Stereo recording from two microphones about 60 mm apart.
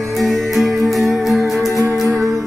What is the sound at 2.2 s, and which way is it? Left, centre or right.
Music, right.